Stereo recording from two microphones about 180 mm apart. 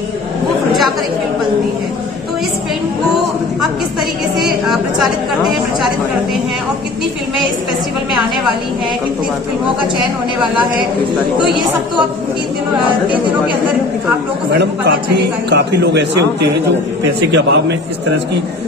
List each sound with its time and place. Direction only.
4.4 s a woman's voice: centre (ahead or behind)
14.5 s a man's voice: 65° right (ahead or behind)
17.3 s a man's voice: 80° right